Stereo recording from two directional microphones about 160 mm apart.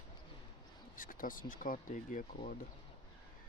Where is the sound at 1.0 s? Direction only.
60° left (ahead or behind).